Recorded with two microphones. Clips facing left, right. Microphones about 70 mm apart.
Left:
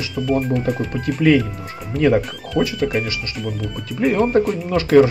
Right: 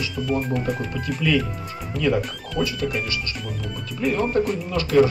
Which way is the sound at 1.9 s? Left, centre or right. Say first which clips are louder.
Left 6 dB; centre.